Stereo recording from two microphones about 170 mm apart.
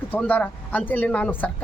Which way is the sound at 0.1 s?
10° left (ahead or behind).